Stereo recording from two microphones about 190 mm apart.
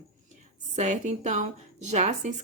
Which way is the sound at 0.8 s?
40° right (ahead or behind).